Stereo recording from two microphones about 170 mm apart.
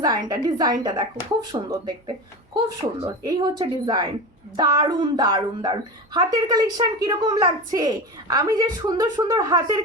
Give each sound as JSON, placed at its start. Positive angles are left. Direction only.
{"t": 0.0, "sound": "a woman's voice", "side_deg": -25}